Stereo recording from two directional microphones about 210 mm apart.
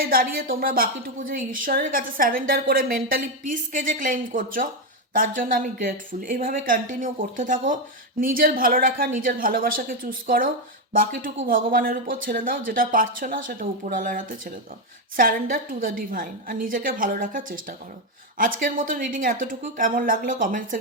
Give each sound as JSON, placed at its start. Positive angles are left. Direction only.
{"t": 0.0, "sound": "a woman's voice", "side_deg": -45}